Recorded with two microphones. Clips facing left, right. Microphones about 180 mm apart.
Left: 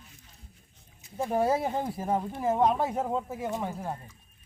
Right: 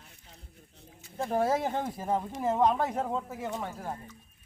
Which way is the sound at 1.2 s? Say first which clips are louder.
Left 1 dB; 5° left (ahead or behind).